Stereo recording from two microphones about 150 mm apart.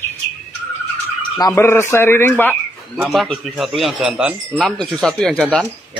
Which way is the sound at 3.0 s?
Centre (ahead or behind).